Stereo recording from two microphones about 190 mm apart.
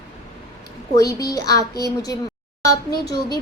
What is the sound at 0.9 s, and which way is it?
Speech, 20° left (ahead or behind).